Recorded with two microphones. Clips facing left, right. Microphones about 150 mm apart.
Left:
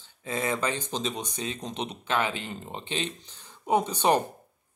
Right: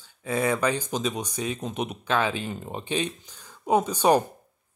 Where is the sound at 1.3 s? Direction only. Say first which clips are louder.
Right 4 dB; 10° right (ahead or behind).